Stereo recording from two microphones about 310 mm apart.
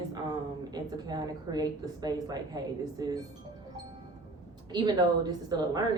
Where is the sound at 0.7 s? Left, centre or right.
Centre.